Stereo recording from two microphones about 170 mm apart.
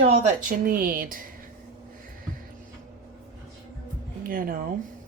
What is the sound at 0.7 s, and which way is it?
Speech, 55° right (ahead or behind).